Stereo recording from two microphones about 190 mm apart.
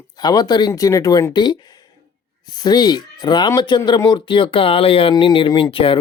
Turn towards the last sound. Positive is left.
turn(degrees=30)  # may be behind; listen again after turning